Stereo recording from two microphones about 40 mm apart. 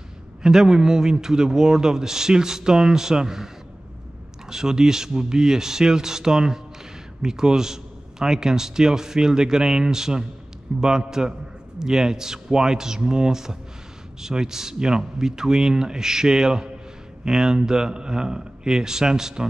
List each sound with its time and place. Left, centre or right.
0.4 s speech: centre
4.5 s speech: centre